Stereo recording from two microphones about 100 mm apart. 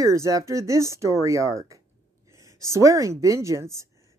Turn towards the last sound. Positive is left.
turn(degrees=-30)  # may be behind; listen again after turning